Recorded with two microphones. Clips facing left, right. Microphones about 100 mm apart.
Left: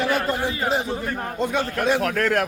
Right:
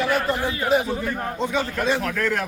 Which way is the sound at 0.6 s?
30° left (ahead or behind).